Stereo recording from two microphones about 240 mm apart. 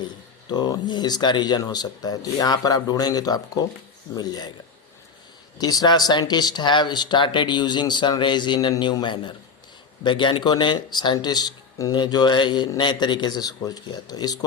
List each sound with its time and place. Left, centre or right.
0.4 s speech: centre
5.5 s speech: centre